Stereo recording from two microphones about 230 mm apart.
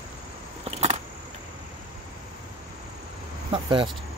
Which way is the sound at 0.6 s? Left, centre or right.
Right.